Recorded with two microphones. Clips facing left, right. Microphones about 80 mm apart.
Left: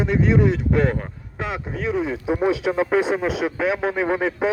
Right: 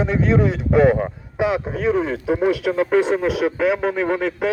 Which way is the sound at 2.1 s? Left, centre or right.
Centre.